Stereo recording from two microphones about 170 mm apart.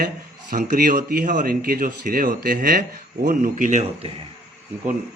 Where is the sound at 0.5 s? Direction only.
50° right (ahead or behind).